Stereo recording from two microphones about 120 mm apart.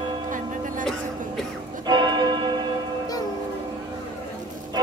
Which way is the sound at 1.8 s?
40° right (ahead or behind).